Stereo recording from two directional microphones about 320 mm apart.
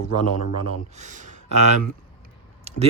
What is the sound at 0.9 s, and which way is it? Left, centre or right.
Speech, right.